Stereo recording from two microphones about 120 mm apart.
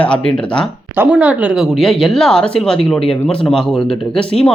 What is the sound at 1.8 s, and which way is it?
Speech, centre (ahead or behind).